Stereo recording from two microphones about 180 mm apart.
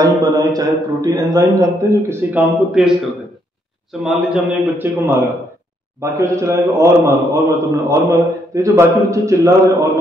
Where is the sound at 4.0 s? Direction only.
5° right (ahead or behind).